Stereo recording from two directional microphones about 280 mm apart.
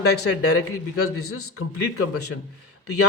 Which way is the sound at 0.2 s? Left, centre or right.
Left.